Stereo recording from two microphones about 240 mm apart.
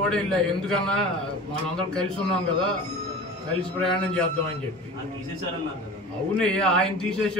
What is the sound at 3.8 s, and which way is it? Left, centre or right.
Speech, centre.